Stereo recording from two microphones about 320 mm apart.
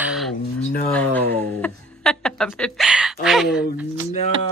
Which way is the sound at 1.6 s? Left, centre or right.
Centre.